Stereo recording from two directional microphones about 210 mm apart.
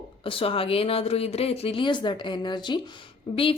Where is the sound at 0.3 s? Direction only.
25° left (ahead or behind).